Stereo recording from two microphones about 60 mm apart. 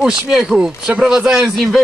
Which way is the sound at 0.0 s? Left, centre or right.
Centre.